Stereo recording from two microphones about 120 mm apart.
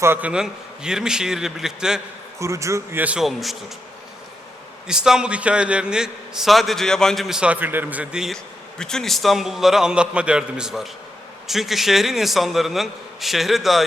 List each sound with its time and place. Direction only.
0.0 s a man's voice: 15° right (ahead or behind)
2.4 s a man's voice: 25° right (ahead or behind)
3.0 s a man's voice: 5° right (ahead or behind)
4.9 s a man's voice: 5° right (ahead or behind)